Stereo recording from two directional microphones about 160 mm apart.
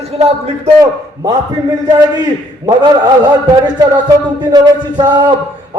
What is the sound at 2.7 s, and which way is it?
Speech, 25° right (ahead or behind).